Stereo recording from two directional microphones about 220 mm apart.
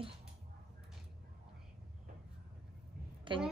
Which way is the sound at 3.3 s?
20° right (ahead or behind).